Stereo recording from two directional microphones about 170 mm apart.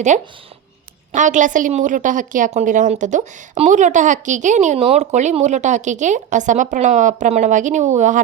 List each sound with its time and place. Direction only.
0.1 s a woman's voice: 45° right (ahead or behind)